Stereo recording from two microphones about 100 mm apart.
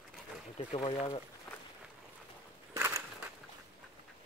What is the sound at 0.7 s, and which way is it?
Speech, 80° left.